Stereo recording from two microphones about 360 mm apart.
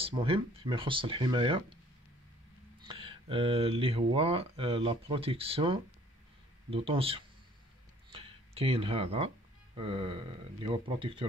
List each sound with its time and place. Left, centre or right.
0.0 s speech: centre
2.8 s speech: centre